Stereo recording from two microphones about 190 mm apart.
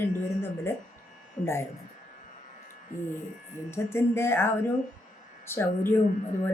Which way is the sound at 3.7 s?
15° left (ahead or behind).